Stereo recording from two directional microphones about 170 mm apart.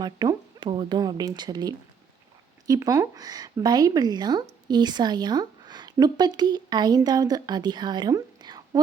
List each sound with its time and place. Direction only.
0.0 s speech: 25° right (ahead or behind)